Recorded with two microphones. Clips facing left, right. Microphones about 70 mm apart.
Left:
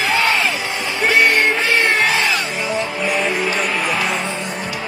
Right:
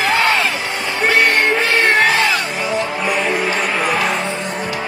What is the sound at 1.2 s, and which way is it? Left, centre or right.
Music, centre.